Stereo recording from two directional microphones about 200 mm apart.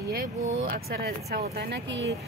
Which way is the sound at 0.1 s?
50° right (ahead or behind).